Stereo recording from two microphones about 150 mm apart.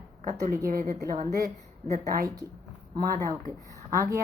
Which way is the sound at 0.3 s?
65° right (ahead or behind).